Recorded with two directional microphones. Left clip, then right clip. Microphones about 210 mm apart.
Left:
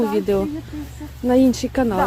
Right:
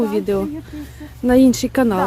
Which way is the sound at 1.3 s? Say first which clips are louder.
Right 3 dB; 30° right (ahead or behind).